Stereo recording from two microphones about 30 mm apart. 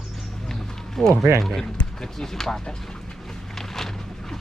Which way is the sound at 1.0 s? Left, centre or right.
Centre.